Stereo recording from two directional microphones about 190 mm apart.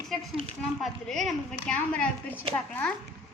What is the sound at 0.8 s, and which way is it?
A child's voice, centre (ahead or behind).